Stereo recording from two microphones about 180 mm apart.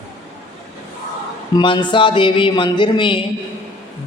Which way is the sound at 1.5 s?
25° left (ahead or behind).